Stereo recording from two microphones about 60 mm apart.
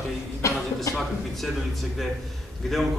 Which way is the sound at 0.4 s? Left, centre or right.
Left.